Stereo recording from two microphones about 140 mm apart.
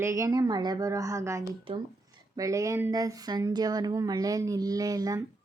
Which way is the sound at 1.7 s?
40° right (ahead or behind).